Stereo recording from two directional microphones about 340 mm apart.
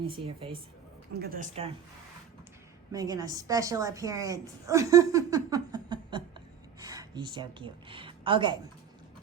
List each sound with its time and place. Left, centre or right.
0.1 s a woman's voice: centre
2.9 s a woman's voice: centre